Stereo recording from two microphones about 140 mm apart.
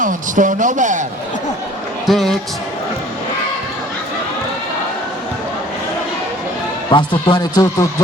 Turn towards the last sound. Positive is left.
turn(degrees=30)  # may be behind; listen again after turning